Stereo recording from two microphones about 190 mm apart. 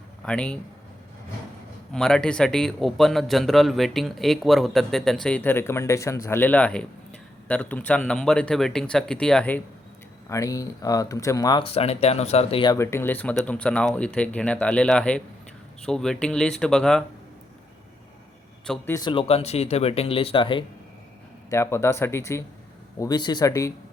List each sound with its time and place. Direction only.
0.3 s a man's voice: 5° left (ahead or behind)
1.9 s a man's voice: 5° left (ahead or behind)
10.2 s a man's voice: 15° left (ahead or behind)
18.6 s a man's voice: 5° left (ahead or behind)
18.9 s speech: 25° left (ahead or behind)
21.5 s speech: 15° left (ahead or behind)